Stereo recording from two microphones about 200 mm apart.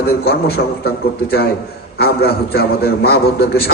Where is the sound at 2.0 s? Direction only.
50° left (ahead or behind).